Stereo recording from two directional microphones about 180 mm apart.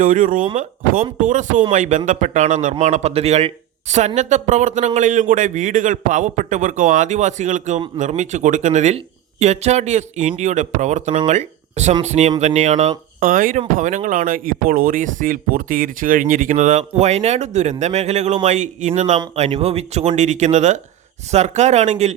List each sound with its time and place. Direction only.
0.0 s speech: 45° right (ahead or behind)